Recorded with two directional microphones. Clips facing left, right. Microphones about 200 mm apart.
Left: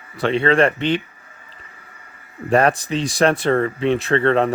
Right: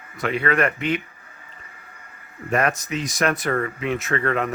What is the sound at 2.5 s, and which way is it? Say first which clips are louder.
Speech: left 6 dB; 30° left (ahead or behind).